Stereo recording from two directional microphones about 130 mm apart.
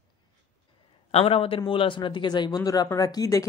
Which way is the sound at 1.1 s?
50° left (ahead or behind).